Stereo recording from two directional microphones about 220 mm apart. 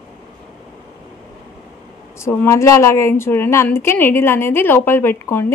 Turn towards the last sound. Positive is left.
turn(degrees=10)  # may be behind; listen again after turning